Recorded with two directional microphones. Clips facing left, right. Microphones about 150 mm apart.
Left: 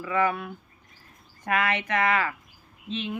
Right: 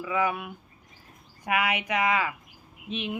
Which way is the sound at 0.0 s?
10° right (ahead or behind).